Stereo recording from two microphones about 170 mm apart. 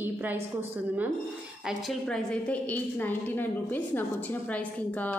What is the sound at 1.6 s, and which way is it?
A woman's voice, 5° left (ahead or behind).